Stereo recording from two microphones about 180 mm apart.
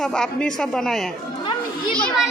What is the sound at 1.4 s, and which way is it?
Children playing, 25° left (ahead or behind).